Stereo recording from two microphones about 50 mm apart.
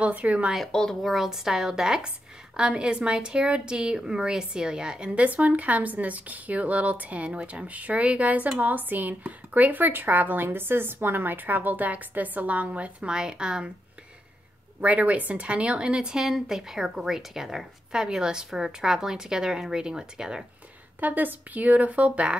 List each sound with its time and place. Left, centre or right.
0.0 s a woman's voice: right
0.7 s speech: centre
1.0 s a woman's voice: centre
14.8 s a woman's voice: right; by 20.4 s centre
21.0 s speech: right